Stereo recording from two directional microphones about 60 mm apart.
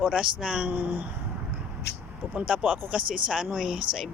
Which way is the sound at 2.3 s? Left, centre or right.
Right.